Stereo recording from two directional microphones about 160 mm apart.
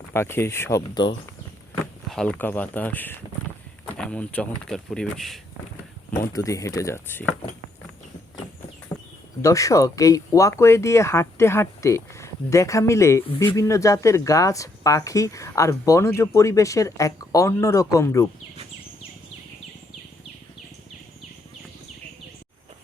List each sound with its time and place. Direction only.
0.1 s speech: 15° left (ahead or behind)
0.8 s speech: 30° left (ahead or behind)
1.8 s speech: 5° left (ahead or behind)
6.3 s speech: 20° left (ahead or behind)
9.4 s speech: 20° left (ahead or behind)